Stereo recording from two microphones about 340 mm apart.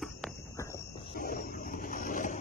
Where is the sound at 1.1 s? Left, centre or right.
Left.